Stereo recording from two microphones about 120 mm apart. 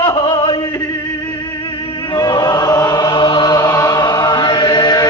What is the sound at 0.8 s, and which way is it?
Music, 25° left (ahead or behind).